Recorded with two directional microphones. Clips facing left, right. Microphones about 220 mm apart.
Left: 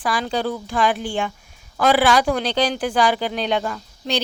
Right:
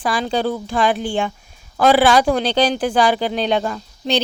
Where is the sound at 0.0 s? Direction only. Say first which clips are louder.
Right 3 dB; 25° right (ahead or behind).